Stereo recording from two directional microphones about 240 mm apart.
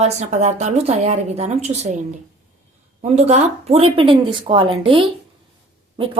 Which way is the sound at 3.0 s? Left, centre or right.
Right.